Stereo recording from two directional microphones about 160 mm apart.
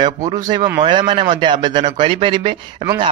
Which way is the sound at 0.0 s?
25° right (ahead or behind).